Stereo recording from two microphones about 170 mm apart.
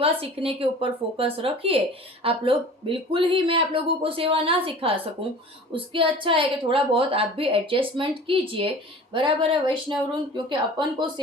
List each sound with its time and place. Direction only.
0.0 s a woman's voice: 35° right (ahead or behind)